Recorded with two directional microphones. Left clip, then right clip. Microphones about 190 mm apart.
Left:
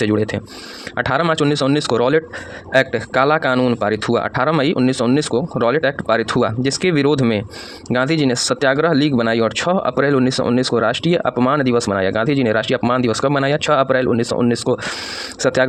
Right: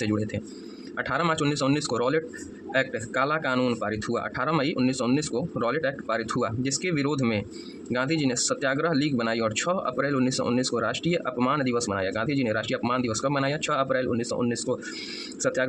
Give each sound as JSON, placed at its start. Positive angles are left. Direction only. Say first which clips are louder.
{"t": 0.0, "sound": "speech", "louder": "left 11 dB", "side_deg": 45}
{"t": 1.2, "sound": "speech", "louder": "left 6 dB", "side_deg": 40}